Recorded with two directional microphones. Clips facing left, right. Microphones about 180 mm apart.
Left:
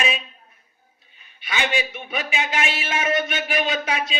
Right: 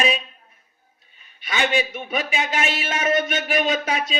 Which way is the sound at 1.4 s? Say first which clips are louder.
Right 3 dB; 40° right (ahead or behind).